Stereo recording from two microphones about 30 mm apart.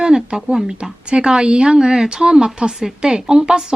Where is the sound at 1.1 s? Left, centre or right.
Right.